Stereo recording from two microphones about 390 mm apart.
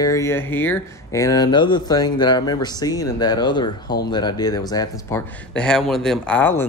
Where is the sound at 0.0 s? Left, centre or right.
Centre.